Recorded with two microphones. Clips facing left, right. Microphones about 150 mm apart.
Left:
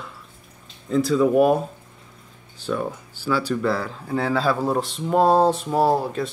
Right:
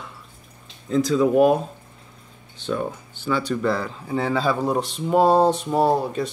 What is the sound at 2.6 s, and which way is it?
Speech, centre (ahead or behind).